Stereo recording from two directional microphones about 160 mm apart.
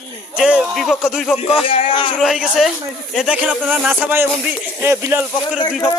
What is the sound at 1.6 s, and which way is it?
Speech, 35° left (ahead or behind).